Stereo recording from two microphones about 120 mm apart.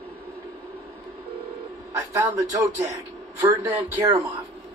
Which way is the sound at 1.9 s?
25° right (ahead or behind).